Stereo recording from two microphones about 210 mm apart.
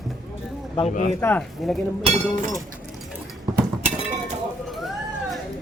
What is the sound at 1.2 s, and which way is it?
Speech, 5° left (ahead or behind).